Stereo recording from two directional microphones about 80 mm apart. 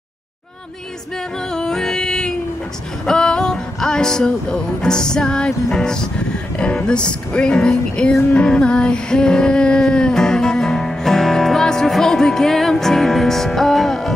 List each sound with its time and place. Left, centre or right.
1.5 s music: centre